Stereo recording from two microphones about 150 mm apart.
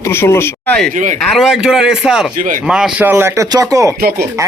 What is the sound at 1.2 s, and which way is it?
Speech, centre (ahead or behind).